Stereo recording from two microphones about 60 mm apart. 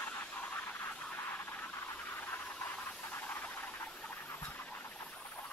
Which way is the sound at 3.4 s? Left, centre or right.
Left.